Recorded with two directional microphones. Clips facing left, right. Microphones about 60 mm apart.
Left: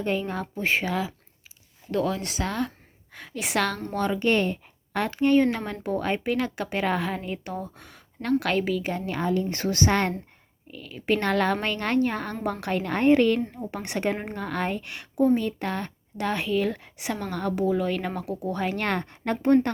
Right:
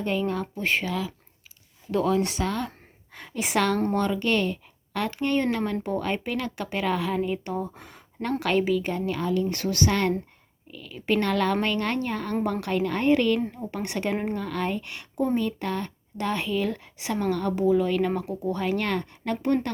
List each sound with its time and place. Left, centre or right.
0.0 s speech: centre
1.9 s a woman's voice: centre
3.9 s speech: centre
4.2 s speech: left
5.2 s speech: centre
7.2 s a woman's voice: centre
9.0 s speech: left
10.7 s speech: centre
12.5 s a woman's voice: left
18.8 s speech: left